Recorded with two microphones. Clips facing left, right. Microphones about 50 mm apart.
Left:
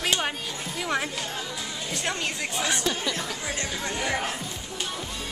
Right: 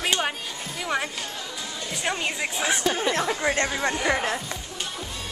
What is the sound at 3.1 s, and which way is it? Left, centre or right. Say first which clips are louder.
Speech: right 6 dB; right.